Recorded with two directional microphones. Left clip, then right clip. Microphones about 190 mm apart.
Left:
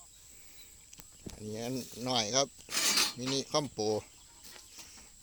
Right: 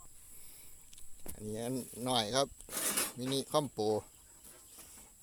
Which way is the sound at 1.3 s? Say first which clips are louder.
Left 1 dB; 10° right (ahead or behind).